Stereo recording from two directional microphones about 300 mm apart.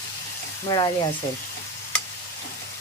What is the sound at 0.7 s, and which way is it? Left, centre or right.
Speech, centre.